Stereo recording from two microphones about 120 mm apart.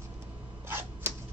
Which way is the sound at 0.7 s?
15° right (ahead or behind).